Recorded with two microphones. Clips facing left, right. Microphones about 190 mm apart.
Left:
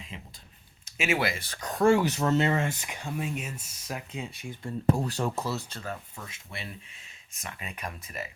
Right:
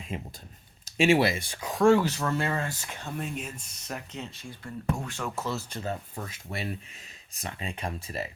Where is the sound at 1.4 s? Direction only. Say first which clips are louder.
Right 2 dB; 15° right (ahead or behind).